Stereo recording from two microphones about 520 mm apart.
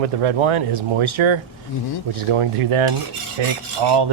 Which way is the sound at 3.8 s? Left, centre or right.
Right.